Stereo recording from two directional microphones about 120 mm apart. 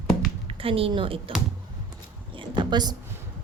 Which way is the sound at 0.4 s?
50° right (ahead or behind).